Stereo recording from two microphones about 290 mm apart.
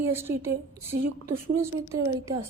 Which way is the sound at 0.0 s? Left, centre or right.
Centre.